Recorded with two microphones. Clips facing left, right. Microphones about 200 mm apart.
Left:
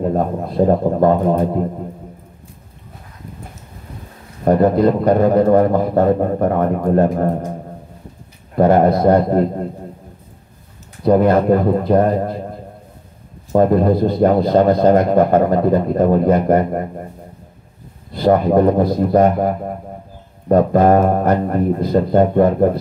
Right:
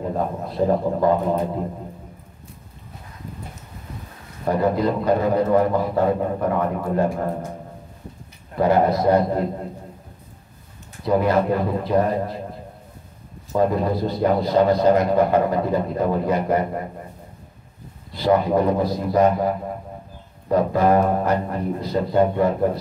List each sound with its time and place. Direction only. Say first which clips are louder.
0.6 s a man's voice: left 5 dB; 40° left (ahead or behind)
4.5 s speech: left 7 dB; 50° left (ahead or behind)
8.5 s speech: left 5 dB; 55° left (ahead or behind)
11.1 s speech: left 6 dB; 50° left (ahead or behind)
13.5 s speech: left 7 dB; 55° left (ahead or behind)
18.1 s speech: left 5 dB; 55° left (ahead or behind)